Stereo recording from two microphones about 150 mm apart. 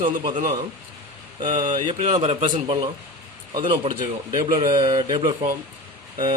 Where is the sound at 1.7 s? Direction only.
35° right (ahead or behind).